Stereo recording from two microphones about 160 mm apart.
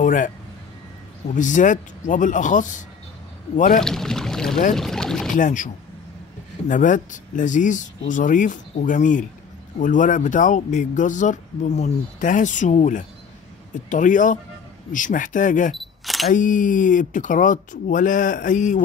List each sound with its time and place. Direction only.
0.0 s a sound: 55° left (ahead or behind)
1.3 s speech: 50° left (ahead or behind)
3.8 s boat: 5° left (ahead or behind)
5.3 s speech: 55° left (ahead or behind)
6.7 s speech: 55° left (ahead or behind)
15.7 s camera: centre (ahead or behind)
16.3 s speech: 55° left (ahead or behind)